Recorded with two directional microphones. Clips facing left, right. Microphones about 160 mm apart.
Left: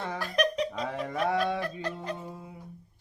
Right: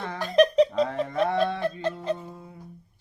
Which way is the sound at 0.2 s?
25° right (ahead or behind).